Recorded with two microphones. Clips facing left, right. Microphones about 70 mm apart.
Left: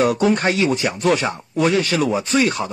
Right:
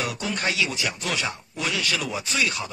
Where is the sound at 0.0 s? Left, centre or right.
Left.